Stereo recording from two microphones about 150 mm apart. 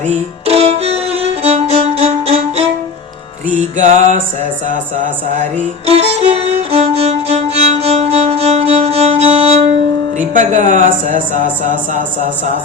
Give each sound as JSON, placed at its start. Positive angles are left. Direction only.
{"t": 0.1, "sound": "music", "side_deg": -45}
{"t": 3.5, "sound": "speech", "side_deg": -55}
{"t": 4.7, "sound": "music", "side_deg": -55}
{"t": 10.2, "sound": "speech", "side_deg": -55}